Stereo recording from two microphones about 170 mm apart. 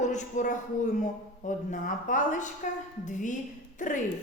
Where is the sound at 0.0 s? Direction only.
45° left (ahead or behind).